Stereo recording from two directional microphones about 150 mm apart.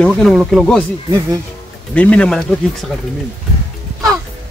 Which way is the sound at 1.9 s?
10° left (ahead or behind).